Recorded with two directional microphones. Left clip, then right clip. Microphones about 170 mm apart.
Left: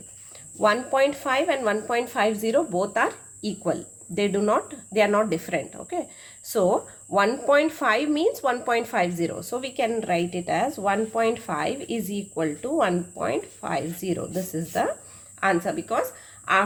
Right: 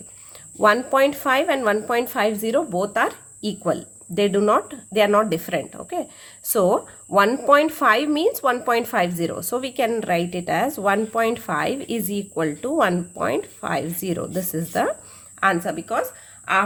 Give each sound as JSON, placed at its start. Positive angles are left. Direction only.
{"t": 0.6, "sound": "speech", "side_deg": -35}